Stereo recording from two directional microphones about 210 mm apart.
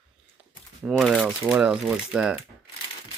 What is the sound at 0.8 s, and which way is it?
Speech, centre (ahead or behind).